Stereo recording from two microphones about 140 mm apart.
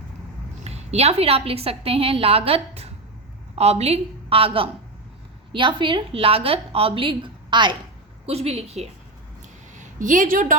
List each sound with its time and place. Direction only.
0.6 s a woman's voice: 50° right (ahead or behind)
8.3 s a woman's voice: 50° right (ahead or behind)
9.7 s a woman's voice: 65° right (ahead or behind)